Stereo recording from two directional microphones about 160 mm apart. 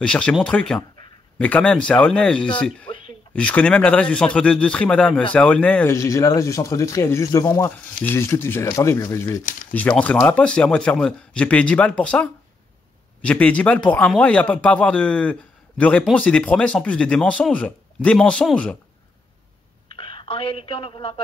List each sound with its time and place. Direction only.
0.0 s speech: 5° left (ahead or behind)
9.4 s speech: 55° left (ahead or behind)
9.7 s speech: 10° left (ahead or behind)
19.9 s a sound: 35° left (ahead or behind)
20.6 s a man's voice: 35° left (ahead or behind)